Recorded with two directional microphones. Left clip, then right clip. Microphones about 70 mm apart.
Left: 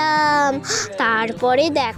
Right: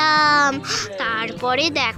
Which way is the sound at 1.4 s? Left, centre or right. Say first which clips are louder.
Left 2 dB; left.